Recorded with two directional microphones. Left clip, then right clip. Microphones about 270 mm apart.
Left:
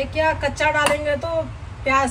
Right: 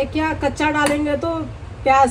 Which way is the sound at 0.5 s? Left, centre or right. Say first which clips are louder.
Even; centre.